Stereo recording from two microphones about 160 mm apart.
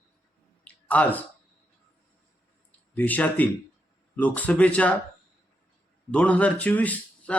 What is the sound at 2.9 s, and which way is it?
Speech, 10° left (ahead or behind).